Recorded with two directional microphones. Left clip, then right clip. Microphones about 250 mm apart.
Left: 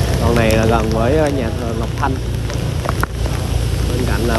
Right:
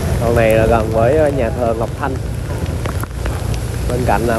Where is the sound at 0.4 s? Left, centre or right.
Centre.